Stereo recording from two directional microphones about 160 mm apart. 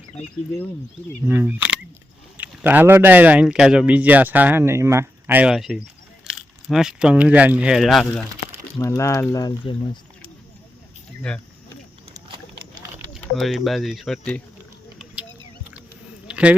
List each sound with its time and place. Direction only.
1.3 s speech: 10° right (ahead or behind)
8.8 s speech: 20° left (ahead or behind)
11.3 s speech: 5° left (ahead or behind)
13.3 s speech: centre (ahead or behind)
14.9 s a sound: 5° right (ahead or behind)